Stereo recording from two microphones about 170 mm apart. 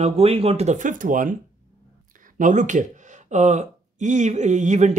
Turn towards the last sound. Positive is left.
turn(degrees=-45)  # may be behind; listen again after turning